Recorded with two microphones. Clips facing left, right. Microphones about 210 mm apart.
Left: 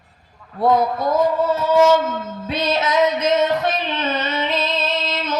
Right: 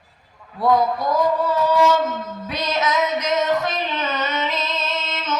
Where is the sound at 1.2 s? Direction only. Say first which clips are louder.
Left 1 dB; 25° left (ahead or behind).